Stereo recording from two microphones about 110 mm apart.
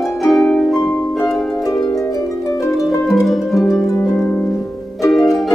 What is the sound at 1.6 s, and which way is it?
Harp, 30° left (ahead or behind).